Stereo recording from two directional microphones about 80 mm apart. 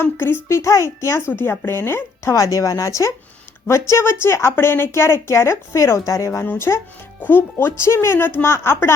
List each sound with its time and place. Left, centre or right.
0.0 s speech: left
0.4 s a woman's voice: left
2.3 s a woman's voice: left
6.4 s a woman's voice: left